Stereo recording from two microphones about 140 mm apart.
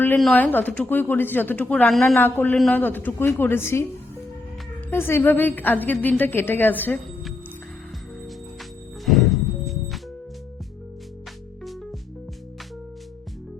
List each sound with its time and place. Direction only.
0.3 s a woman's voice: 10° left (ahead or behind)
1.9 s speech: centre (ahead or behind)
2.1 s a woman's voice: 15° left (ahead or behind)
4.9 s a woman's voice: 15° left (ahead or behind)
9.0 s music: centre (ahead or behind)